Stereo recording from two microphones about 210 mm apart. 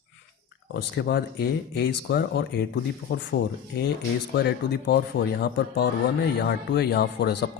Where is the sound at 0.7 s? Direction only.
50° left (ahead or behind).